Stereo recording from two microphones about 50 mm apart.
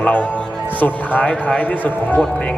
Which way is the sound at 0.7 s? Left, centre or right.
Left.